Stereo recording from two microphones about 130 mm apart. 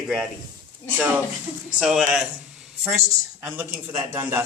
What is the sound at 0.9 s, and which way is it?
Speech, 15° right (ahead or behind).